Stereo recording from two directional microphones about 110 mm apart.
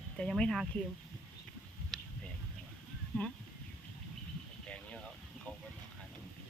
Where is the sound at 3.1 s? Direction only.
15° left (ahead or behind).